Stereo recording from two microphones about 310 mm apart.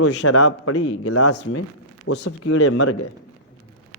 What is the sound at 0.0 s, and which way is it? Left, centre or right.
Speech, left.